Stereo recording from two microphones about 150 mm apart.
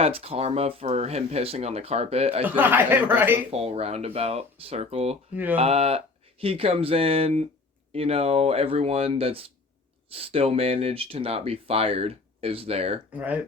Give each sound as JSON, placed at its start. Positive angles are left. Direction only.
{"t": 0.0, "sound": "speech", "side_deg": -40}
{"t": 2.4, "sound": "speech", "side_deg": -15}
{"t": 3.5, "sound": "speech", "side_deg": -40}
{"t": 5.3, "sound": "speech", "side_deg": -10}
{"t": 5.5, "sound": "speech", "side_deg": -40}
{"t": 13.1, "sound": "speech", "side_deg": -10}